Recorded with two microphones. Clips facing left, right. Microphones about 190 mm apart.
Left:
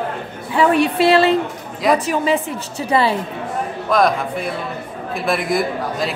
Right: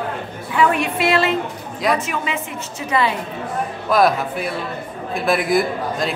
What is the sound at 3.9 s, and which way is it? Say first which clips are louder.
A man's voice: even; 5° right (ahead or behind).